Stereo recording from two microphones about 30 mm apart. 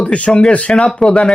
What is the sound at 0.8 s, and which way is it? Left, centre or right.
Speech, centre.